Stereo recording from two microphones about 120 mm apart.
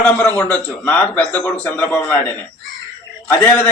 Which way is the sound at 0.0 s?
15° left (ahead or behind).